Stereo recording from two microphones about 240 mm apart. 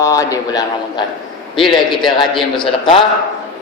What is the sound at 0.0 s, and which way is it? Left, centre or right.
A man's voice, centre.